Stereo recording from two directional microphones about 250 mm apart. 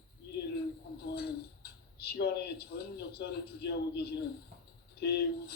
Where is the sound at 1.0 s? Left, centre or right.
Left.